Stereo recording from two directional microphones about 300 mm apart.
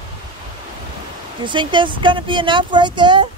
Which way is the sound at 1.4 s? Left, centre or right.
Centre.